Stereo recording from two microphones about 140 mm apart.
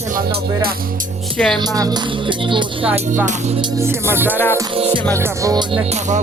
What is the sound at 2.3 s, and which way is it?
Music, 35° right (ahead or behind).